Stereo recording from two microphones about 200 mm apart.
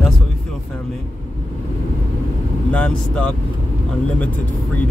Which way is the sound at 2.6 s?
5° left (ahead or behind).